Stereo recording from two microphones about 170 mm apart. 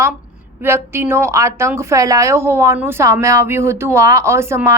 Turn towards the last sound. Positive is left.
turn(degrees=-15)  # may be behind; listen again after turning